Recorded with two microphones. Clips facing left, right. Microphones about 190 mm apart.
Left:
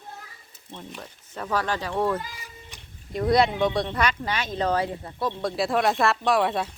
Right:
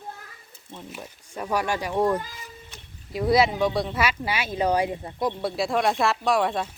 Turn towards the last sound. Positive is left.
turn(degrees=0)  # may be behind; listen again after turning